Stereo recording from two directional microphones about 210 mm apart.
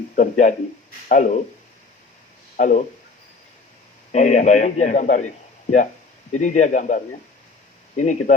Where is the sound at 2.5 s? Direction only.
35° left (ahead or behind).